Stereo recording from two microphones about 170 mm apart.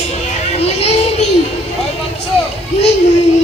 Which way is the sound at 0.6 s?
40° left (ahead or behind).